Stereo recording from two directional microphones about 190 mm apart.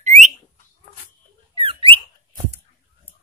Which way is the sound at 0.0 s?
40° right (ahead or behind).